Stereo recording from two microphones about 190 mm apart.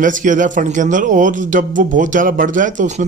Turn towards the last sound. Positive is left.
turn(degrees=-40)  # may be behind; listen again after turning